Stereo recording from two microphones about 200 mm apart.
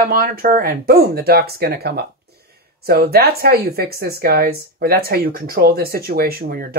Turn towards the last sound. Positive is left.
turn(degrees=-45)  # may be behind; listen again after turning